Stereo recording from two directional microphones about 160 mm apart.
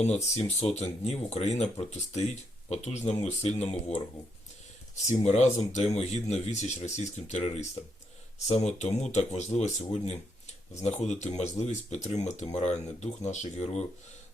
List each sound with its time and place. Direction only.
0.0 s speech: 45° left (ahead or behind)